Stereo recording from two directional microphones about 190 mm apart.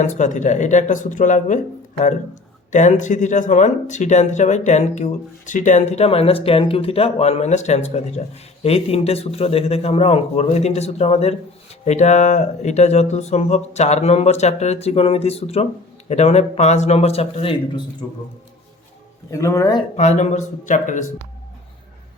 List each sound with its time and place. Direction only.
0.0 s speech: 40° left (ahead or behind)
2.7 s speech: 40° left (ahead or behind)
19.3 s speech: 15° left (ahead or behind)
20.0 s speech: 35° left (ahead or behind)